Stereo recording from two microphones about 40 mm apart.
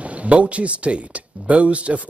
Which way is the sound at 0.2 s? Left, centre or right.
Right.